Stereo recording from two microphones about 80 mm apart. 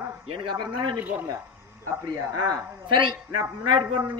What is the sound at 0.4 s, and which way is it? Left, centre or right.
Speech, right.